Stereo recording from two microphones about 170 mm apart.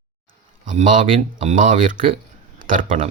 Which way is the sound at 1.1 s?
30° right (ahead or behind).